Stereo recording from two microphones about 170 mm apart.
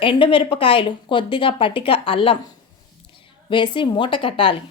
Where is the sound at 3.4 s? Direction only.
30° left (ahead or behind).